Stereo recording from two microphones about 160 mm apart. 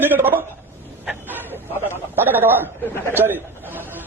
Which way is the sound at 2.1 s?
10° right (ahead or behind).